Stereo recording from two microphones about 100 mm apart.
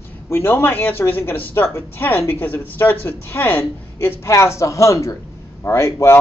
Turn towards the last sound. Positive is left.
turn(degrees=30)  # may be behind; listen again after turning